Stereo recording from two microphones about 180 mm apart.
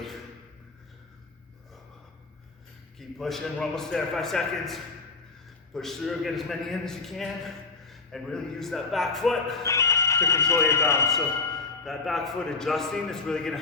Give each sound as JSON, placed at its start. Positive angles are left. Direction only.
{"t": 3.0, "sound": "a man's voice", "side_deg": 0}
{"t": 9.6, "sound": "speech", "side_deg": 15}
{"t": 11.9, "sound": "a man's voice", "side_deg": 0}